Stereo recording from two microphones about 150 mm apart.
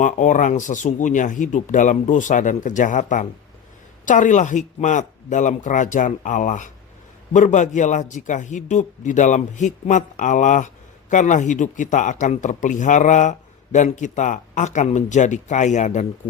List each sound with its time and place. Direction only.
0.0 s speech: 60° left (ahead or behind)